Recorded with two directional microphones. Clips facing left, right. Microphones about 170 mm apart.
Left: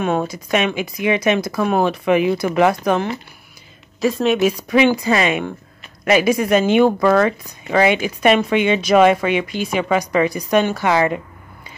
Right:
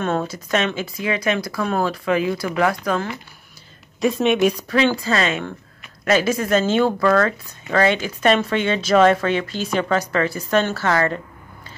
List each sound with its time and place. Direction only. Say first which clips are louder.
0.0 s speech: left 3 dB; 10° left (ahead or behind)
4.0 s speech: left 1 dB; centre (ahead or behind)
4.6 s speech: left 4 dB; 15° left (ahead or behind)